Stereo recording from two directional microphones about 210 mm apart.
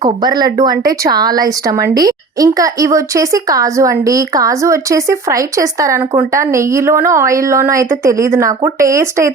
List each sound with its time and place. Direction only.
0.0 s speech: 20° right (ahead or behind)